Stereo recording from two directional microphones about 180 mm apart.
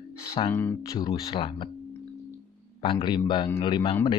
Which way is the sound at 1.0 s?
30° left (ahead or behind).